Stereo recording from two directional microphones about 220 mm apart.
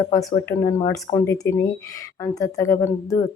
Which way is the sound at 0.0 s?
15° left (ahead or behind).